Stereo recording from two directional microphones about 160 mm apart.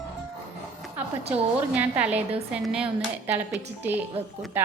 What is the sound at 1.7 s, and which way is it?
A woman's voice, 10° right (ahead or behind).